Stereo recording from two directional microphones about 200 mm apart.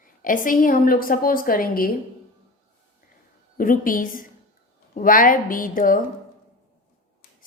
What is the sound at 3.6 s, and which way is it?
A woman's voice, 45° left (ahead or behind).